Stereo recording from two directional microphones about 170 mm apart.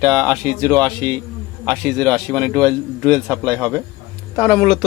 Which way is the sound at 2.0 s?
5° left (ahead or behind).